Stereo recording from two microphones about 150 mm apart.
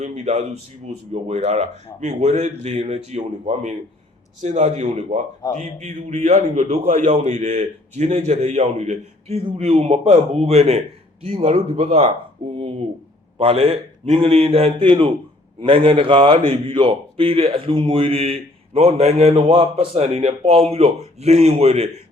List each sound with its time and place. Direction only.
0.0 s a man's voice: 50° right (ahead or behind)
6.8 s a man's voice: 60° right (ahead or behind)
12.5 s a sound: 40° right (ahead or behind)
13.4 s a man's voice: 40° right (ahead or behind)